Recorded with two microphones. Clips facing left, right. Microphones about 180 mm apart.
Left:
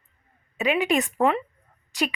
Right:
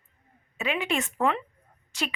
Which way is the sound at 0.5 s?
15° left (ahead or behind).